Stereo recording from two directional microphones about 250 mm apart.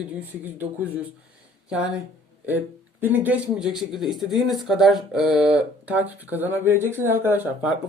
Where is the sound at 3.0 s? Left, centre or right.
Centre.